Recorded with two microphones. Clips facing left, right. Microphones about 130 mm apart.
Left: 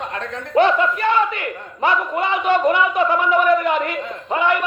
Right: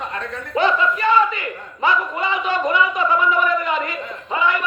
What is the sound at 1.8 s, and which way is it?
A man's voice, 60° left (ahead or behind).